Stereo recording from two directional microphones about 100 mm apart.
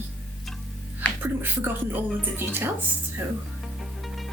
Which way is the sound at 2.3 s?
20° right (ahead or behind).